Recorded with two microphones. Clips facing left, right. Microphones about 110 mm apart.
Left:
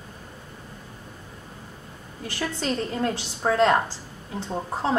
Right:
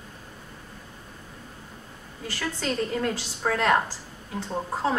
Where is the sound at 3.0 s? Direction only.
30° left (ahead or behind).